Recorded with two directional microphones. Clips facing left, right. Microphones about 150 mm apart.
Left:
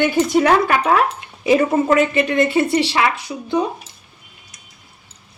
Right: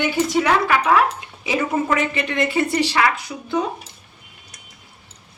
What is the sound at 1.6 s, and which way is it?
A woman's voice, 30° left (ahead or behind).